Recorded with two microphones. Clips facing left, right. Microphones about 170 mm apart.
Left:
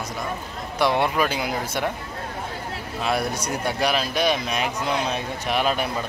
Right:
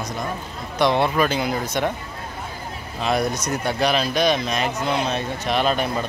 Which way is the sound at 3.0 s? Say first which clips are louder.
Right 3 dB; 5° left (ahead or behind).